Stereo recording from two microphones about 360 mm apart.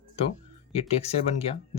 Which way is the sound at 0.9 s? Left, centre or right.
Centre.